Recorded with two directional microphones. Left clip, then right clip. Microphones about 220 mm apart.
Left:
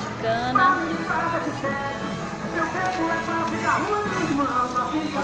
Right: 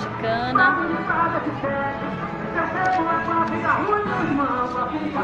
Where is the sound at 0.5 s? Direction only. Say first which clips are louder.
Right 2 dB; 25° right (ahead or behind).